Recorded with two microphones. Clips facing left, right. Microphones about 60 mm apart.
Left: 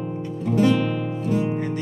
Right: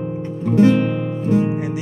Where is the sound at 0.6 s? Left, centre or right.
Right.